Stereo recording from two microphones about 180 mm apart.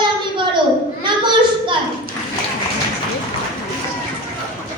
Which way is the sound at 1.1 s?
25° right (ahead or behind).